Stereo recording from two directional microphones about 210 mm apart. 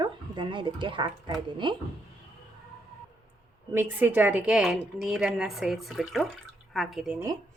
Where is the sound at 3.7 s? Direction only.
10° right (ahead or behind).